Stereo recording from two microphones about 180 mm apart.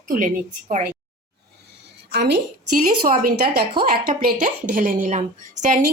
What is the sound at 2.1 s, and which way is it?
Speech, 70° right (ahead or behind).